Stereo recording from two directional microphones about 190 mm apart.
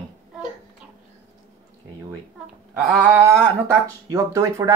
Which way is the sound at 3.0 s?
15° right (ahead or behind).